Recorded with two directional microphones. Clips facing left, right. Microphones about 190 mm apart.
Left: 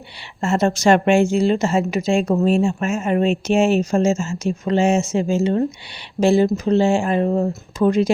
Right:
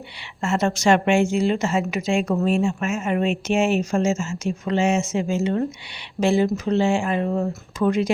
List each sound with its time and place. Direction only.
0.4 s speech: 35° left (ahead or behind)